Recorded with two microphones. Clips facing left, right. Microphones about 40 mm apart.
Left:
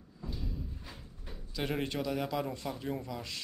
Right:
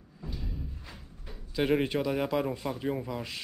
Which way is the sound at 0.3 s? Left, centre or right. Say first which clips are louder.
Right 1 dB; centre.